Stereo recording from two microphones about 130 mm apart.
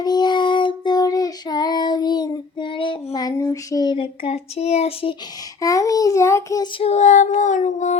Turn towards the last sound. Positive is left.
turn(degrees=65)  # may be behind; listen again after turning